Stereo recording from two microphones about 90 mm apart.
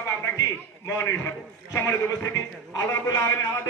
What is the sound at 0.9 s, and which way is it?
Speech, 20° left (ahead or behind).